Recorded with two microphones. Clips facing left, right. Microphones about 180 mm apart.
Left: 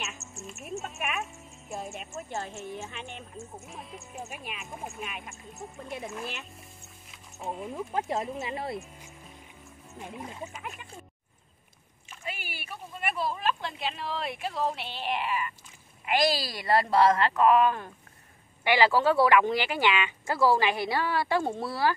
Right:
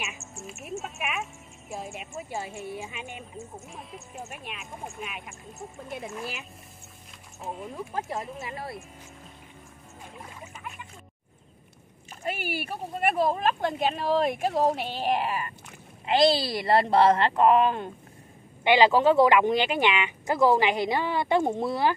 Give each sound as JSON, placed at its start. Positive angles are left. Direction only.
{"t": 0.5, "sound": "speech", "side_deg": 0}
{"t": 7.1, "sound": "music", "side_deg": 0}
{"t": 7.7, "sound": "speech", "side_deg": 20}
{"t": 12.1, "sound": "a sound", "side_deg": -45}
{"t": 12.7, "sound": "speech", "side_deg": -45}
{"t": 16.1, "sound": "speech", "side_deg": -25}